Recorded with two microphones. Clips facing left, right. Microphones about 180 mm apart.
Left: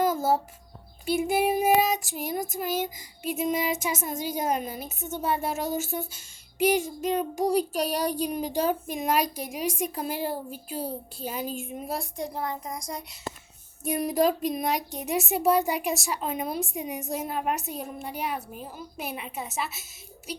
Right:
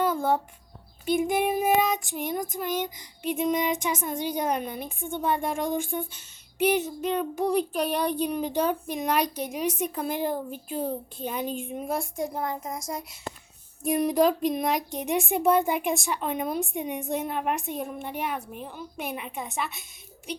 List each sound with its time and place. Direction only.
0.0 s a sound: 5° left (ahead or behind)
1.0 s child singing: 10° left (ahead or behind)
7.4 s child singing: 40° left (ahead or behind)
8.9 s child singing: 10° left (ahead or behind)
10.5 s speech: 45° right (ahead or behind)
11.2 s speech: 5° left (ahead or behind)
12.4 s a child's voice: 20° right (ahead or behind)
13.8 s speech: centre (ahead or behind)
17.5 s child singing: 40° left (ahead or behind)
18.0 s speech: centre (ahead or behind)